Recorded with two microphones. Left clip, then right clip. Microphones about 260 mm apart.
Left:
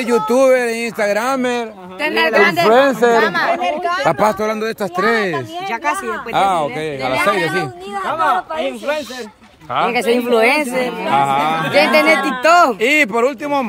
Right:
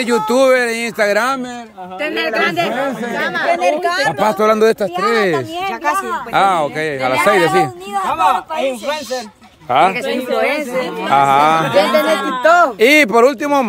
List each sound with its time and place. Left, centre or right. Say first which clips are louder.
0.0 s speech: even; centre
2.0 s speech: left 4 dB; left
3.5 s speech: right 4 dB; right
4.1 s speech: right 3 dB; centre
7.9 s speech: right 1 dB; right
9.7 s speech: right 5 dB; right
9.9 s speech: left 3 dB; left
11.1 s speech: right 5 dB; centre
11.7 s speech: left 1 dB; left
12.8 s speech: right 4 dB; centre